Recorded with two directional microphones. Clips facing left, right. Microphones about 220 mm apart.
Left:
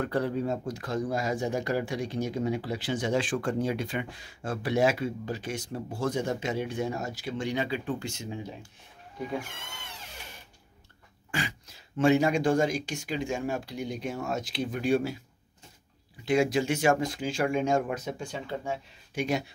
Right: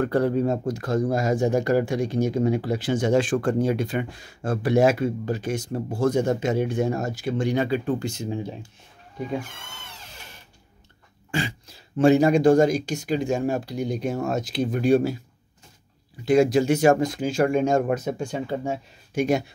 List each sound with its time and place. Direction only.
0.0 s speech: 45° right (ahead or behind); by 8.5 s 30° right (ahead or behind)
11.3 s speech: 30° right (ahead or behind)
16.3 s speech: 40° right (ahead or behind)